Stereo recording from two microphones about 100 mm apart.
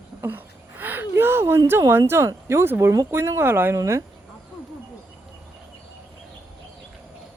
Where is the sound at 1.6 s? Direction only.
25° right (ahead or behind).